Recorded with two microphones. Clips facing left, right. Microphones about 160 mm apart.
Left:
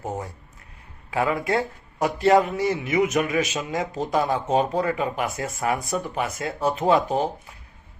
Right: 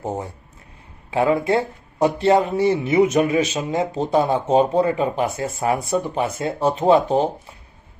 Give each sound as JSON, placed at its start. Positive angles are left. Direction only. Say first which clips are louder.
{"t": 0.0, "sound": "speech", "louder": "right 4 dB", "side_deg": -30}